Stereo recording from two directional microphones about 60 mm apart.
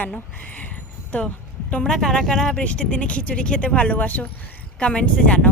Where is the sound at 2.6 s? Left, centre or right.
Left.